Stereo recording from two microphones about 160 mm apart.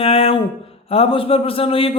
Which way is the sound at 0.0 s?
40° left (ahead or behind).